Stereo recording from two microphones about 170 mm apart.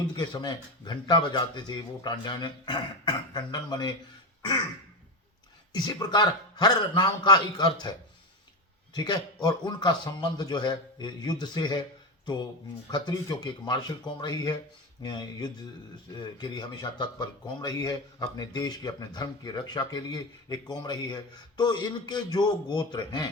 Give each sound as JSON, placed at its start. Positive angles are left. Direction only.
{"t": 0.2, "sound": "speech", "side_deg": 25}
{"t": 5.7, "sound": "speech", "side_deg": 25}
{"t": 8.9, "sound": "speech", "side_deg": 25}